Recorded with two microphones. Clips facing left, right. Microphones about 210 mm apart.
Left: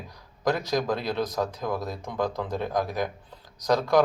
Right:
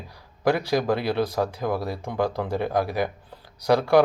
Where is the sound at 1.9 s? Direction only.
30° right (ahead or behind).